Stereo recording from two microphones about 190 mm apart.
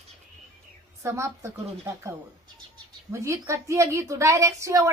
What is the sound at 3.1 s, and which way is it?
Speech, 15° right (ahead or behind).